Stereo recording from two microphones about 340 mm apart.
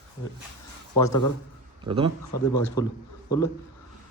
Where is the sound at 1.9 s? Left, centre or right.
Centre.